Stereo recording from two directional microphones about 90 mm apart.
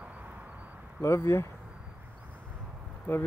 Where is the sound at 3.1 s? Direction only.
20° left (ahead or behind).